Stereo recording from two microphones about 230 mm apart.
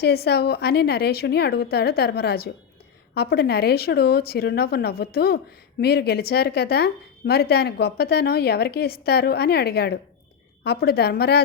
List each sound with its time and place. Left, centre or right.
0.0 s a woman's voice: left